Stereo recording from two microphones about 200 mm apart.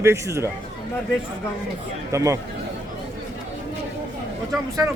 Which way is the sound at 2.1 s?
15° right (ahead or behind).